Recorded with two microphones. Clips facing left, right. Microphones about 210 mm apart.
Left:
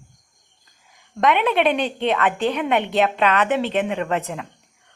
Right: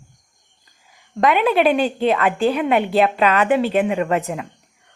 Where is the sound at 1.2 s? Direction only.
5° right (ahead or behind).